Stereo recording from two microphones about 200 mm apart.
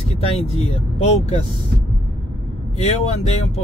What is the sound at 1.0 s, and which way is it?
Speech, 30° left (ahead or behind).